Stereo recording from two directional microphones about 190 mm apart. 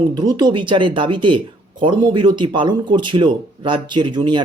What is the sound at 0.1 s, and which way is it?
Speech, 20° right (ahead or behind).